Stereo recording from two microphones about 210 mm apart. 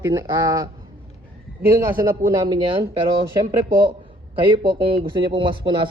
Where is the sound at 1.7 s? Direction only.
15° right (ahead or behind).